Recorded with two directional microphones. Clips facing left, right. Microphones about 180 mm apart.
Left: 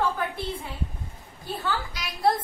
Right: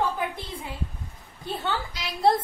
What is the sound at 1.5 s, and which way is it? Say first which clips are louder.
Speech: even; 25° right (ahead or behind).